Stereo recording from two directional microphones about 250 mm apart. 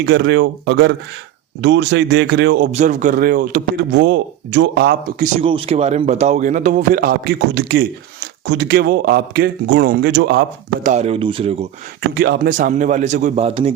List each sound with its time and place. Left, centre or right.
0.0 s speech: right
2.7 s a man's voice: right
5.4 s a man's voice: right
10.8 s speech: right
12.1 s speech: right